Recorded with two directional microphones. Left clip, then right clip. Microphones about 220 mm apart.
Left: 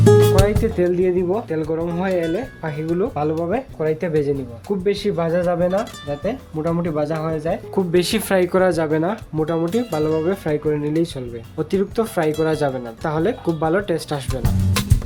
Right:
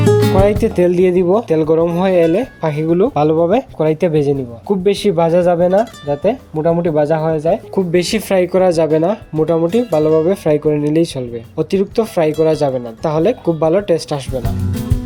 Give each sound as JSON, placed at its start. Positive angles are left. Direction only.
{"t": 0.0, "sound": "music", "side_deg": 0}
{"t": 0.6, "sound": "speech", "side_deg": -30}
{"t": 7.9, "sound": "speech", "side_deg": -10}
{"t": 9.9, "sound": "speech", "side_deg": 0}
{"t": 10.2, "sound": "speech", "side_deg": -20}